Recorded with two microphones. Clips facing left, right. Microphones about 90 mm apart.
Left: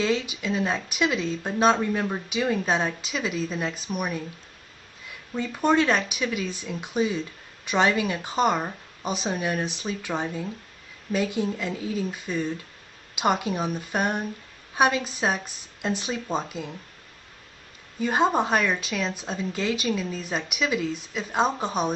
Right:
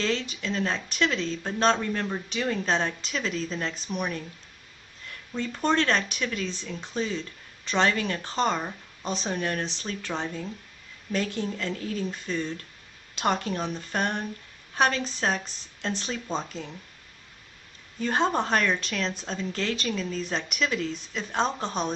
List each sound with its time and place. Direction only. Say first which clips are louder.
0.0 s speech: left 3 dB; 10° left (ahead or behind)
18.0 s speech: left 3 dB; 10° left (ahead or behind)